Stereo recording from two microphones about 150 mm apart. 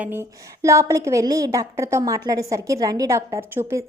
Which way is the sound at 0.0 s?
15° right (ahead or behind).